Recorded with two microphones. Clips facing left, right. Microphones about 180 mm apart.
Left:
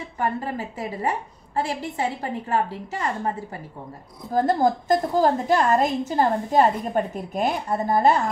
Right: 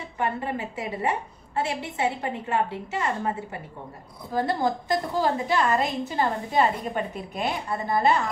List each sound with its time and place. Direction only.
0.2 s a woman's voice: 40° left (ahead or behind)
4.3 s a woman's voice: 45° left (ahead or behind)